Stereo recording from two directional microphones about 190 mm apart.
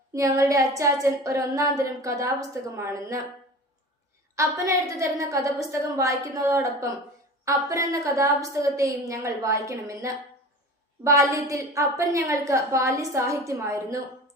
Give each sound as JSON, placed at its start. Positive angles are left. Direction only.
{"t": 0.1, "sound": "a woman's voice", "side_deg": -15}
{"t": 4.4, "sound": "a woman's voice", "side_deg": -15}